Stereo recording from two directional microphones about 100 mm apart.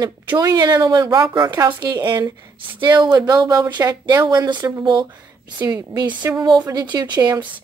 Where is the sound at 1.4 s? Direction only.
35° right (ahead or behind).